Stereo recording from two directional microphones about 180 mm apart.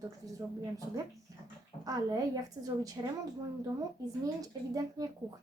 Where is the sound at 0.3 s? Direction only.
20° right (ahead or behind).